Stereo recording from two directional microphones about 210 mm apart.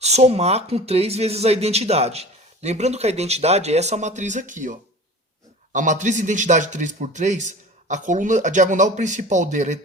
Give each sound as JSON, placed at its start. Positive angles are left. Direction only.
{"t": 0.0, "sound": "speech", "side_deg": -30}